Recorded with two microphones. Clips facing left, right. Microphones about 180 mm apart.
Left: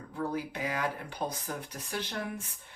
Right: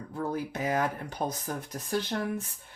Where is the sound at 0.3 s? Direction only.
45° right (ahead or behind).